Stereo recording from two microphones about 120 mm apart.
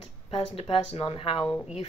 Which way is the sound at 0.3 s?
50° left (ahead or behind).